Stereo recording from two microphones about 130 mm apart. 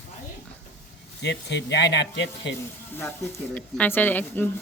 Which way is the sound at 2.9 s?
15° left (ahead or behind).